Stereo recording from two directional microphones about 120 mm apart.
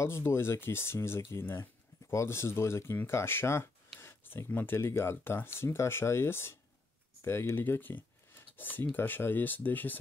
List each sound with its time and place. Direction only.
0.0 s speech: 20° left (ahead or behind)